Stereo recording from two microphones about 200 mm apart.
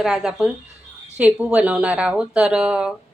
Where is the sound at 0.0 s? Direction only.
5° right (ahead or behind).